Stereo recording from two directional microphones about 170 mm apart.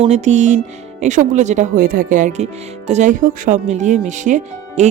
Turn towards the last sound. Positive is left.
turn(degrees=-45)  # may be behind; listen again after turning